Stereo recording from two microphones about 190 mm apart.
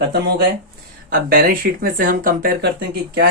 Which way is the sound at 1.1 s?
50° right (ahead or behind).